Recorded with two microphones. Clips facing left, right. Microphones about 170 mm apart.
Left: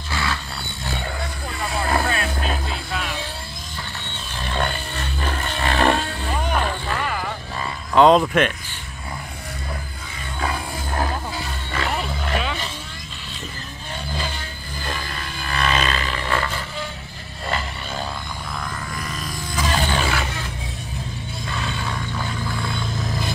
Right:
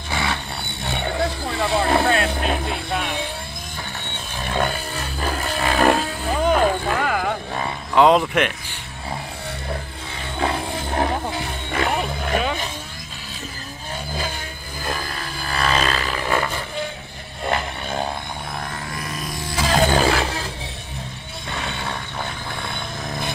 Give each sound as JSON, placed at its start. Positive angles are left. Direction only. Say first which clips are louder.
{"t": 0.1, "sound": "roaring cats", "louder": "right 2 dB", "side_deg": -20}
{"t": 1.7, "sound": "vehicle", "louder": "right 3 dB", "side_deg": -25}
{"t": 2.1, "sound": "vehicle", "louder": "right 4 dB", "side_deg": -65}
{"t": 4.4, "sound": "roaring cats", "louder": "right 2 dB", "side_deg": -10}
{"t": 5.6, "sound": "a sound", "louder": "right 2 dB", "side_deg": -5}
{"t": 7.0, "sound": "a sound", "louder": "right 4 dB", "side_deg": -75}
{"t": 7.9, "sound": "speech", "louder": "left 1 dB", "side_deg": -10}
{"t": 10.4, "sound": "music", "louder": "right 3 dB", "side_deg": -25}
{"t": 11.9, "sound": "roaring cats", "louder": "right 3 dB", "side_deg": -15}
{"t": 12.4, "sound": "vehicle", "louder": "right 4 dB", "side_deg": -45}
{"t": 15.4, "sound": "roar", "louder": "right 1 dB", "side_deg": -35}
{"t": 15.9, "sound": "a sound", "louder": "right 2 dB", "side_deg": -5}
{"t": 17.5, "sound": "a sound", "louder": "right 4 dB", "side_deg": -55}
{"t": 19.5, "sound": "music", "louder": "right 5 dB", "side_deg": -35}